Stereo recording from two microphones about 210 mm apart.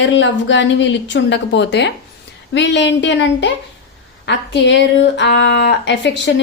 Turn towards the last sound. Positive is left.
turn(degrees=55)  # may be behind; listen again after turning